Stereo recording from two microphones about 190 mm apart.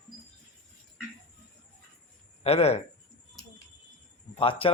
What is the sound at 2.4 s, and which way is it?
Speech, 35° left (ahead or behind).